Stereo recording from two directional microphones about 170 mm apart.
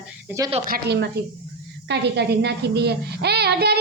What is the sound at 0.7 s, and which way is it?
A child's voice, 80° right.